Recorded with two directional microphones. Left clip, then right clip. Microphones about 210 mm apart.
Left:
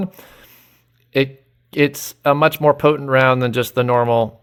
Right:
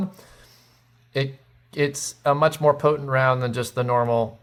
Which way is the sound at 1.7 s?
45° left (ahead or behind).